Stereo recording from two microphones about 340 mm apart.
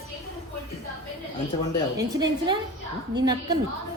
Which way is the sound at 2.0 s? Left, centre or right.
Centre.